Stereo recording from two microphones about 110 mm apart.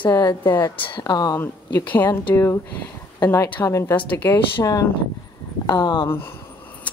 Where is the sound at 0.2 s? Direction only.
40° left (ahead or behind).